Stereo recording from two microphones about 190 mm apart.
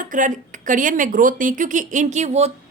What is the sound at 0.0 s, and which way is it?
A woman's voice, 45° right (ahead or behind).